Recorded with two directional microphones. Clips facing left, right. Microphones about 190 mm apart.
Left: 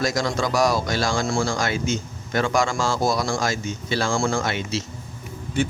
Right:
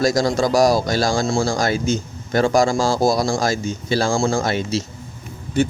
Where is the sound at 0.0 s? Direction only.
35° right (ahead or behind).